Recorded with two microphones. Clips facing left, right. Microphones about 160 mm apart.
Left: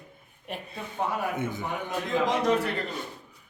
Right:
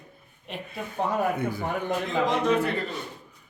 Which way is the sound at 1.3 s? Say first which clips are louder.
Right 2 dB; 20° left (ahead or behind).